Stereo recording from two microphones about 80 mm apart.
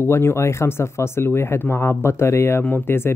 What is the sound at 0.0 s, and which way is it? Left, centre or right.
Speech, left.